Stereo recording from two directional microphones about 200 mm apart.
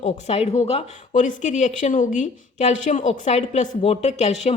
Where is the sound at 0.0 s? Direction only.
30° left (ahead or behind).